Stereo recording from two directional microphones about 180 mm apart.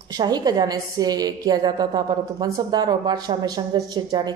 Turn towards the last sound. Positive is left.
turn(degrees=-20)  # may be behind; listen again after turning